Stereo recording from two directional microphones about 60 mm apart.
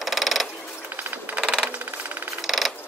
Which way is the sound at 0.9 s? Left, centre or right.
Right.